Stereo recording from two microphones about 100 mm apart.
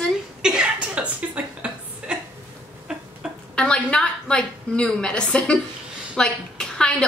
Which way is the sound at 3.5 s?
10° left (ahead or behind).